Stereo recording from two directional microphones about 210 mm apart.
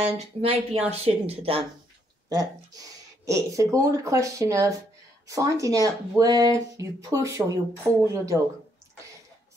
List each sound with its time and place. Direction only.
0.0 s speech: 30° right (ahead or behind)
3.3 s speech: 15° right (ahead or behind)